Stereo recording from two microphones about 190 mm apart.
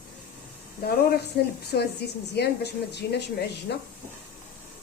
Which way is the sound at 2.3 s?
60° left (ahead or behind).